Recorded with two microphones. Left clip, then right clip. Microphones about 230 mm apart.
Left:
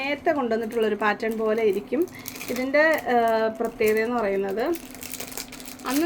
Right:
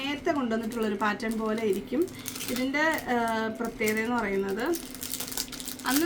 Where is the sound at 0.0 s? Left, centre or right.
Right.